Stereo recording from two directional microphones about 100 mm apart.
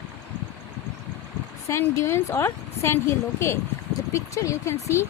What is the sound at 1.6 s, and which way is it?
A woman's voice, 30° left (ahead or behind).